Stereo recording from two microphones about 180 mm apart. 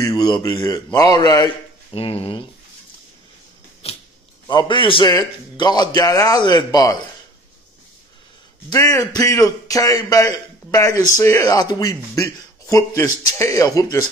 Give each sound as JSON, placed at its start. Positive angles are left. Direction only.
{"t": 0.0, "sound": "speech", "side_deg": 25}
{"t": 3.8, "sound": "a sound", "side_deg": 35}
{"t": 4.5, "sound": "speech", "side_deg": 25}
{"t": 8.6, "sound": "speech", "side_deg": 15}